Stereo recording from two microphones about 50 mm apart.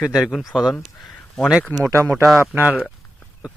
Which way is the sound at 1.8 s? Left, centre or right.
Right.